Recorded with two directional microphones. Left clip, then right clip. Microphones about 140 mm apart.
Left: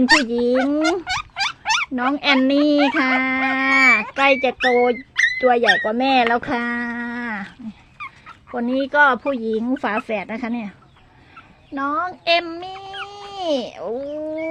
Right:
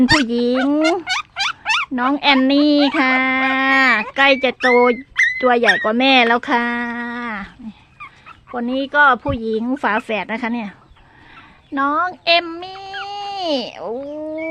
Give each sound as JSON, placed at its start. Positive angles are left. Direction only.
{"t": 0.0, "sound": "speech", "side_deg": -20}
{"t": 0.3, "sound": "speech", "side_deg": -30}
{"t": 1.6, "sound": "a sound", "side_deg": -5}
{"t": 2.0, "sound": "speech", "side_deg": -20}
{"t": 4.7, "sound": "speech", "side_deg": -50}
{"t": 5.4, "sound": "speech", "side_deg": -40}
{"t": 6.6, "sound": "a sound", "side_deg": -20}
{"t": 8.4, "sound": "speech", "side_deg": -15}
{"t": 12.2, "sound": "speech", "side_deg": -15}